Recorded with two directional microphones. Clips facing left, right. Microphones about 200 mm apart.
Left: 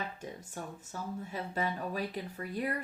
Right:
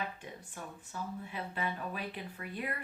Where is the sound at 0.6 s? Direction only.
40° left (ahead or behind).